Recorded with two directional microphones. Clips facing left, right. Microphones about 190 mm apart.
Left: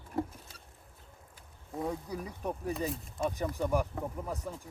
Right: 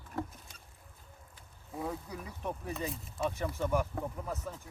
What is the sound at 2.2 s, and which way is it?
Speech, 35° left (ahead or behind).